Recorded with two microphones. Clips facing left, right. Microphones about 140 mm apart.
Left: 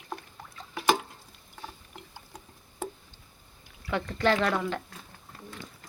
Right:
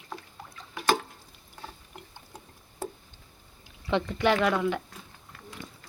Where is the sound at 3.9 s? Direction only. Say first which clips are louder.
Right 1 dB; 15° right (ahead or behind).